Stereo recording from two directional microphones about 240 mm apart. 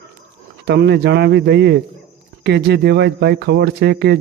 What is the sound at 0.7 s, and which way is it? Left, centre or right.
A man's voice, right.